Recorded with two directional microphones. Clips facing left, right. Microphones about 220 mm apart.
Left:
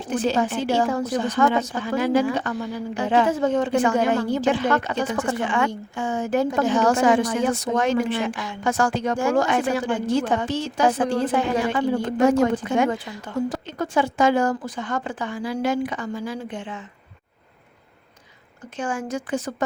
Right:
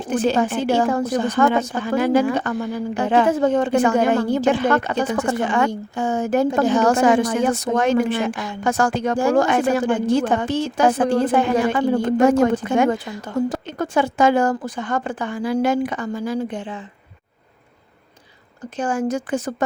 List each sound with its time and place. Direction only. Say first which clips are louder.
0.1 s a woman's voice: right 3 dB; 55° right (ahead or behind); by 16.8 s 35° right (ahead or behind)
18.8 s a woman's voice: right 5 dB; 40° right (ahead or behind)